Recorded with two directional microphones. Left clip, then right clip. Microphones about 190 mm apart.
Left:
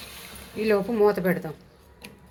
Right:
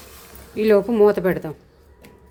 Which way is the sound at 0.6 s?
40° right (ahead or behind).